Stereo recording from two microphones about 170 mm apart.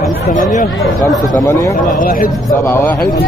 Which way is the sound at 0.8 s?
Centre (ahead or behind).